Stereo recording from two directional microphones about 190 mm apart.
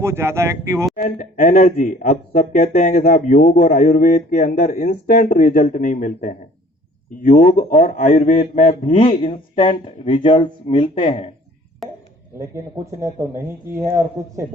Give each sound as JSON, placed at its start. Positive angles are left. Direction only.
{"t": 0.0, "sound": "speech", "side_deg": -15}
{"t": 0.9, "sound": "a man's voice", "side_deg": 40}
{"t": 3.5, "sound": "a man's voice", "side_deg": 50}
{"t": 11.8, "sound": "a sound", "side_deg": 0}
{"t": 12.4, "sound": "speech", "side_deg": -15}